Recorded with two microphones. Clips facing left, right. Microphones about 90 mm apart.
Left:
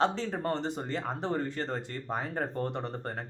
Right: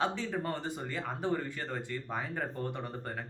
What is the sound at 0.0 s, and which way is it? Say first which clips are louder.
Speech: left 4 dB; 40° left (ahead or behind).